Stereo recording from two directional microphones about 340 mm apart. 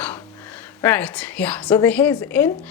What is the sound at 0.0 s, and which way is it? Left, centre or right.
A woman's voice, centre.